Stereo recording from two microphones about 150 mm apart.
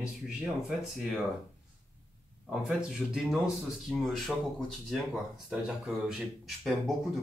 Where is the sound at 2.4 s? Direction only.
5° right (ahead or behind).